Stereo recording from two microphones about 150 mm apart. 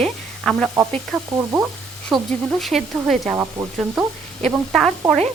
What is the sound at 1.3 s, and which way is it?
Speech, 15° right (ahead or behind).